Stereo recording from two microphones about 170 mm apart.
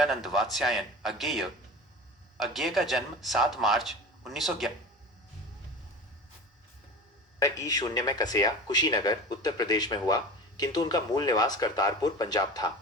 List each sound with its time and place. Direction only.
0.0 s speech: centre (ahead or behind)
7.3 s speech: 20° left (ahead or behind)